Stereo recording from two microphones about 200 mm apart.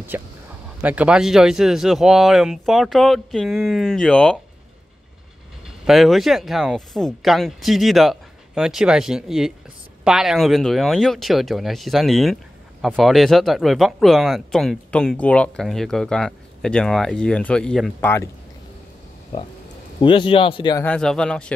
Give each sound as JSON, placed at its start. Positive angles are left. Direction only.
{"t": 0.1, "sound": "speech", "side_deg": -10}
{"t": 5.9, "sound": "speech", "side_deg": 0}
{"t": 20.0, "sound": "speech", "side_deg": 25}
{"t": 20.8, "sound": "speech", "side_deg": 5}